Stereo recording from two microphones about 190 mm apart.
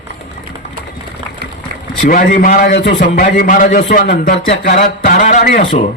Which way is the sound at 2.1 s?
45° left (ahead or behind).